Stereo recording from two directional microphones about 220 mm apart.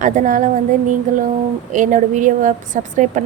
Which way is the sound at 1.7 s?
35° right (ahead or behind).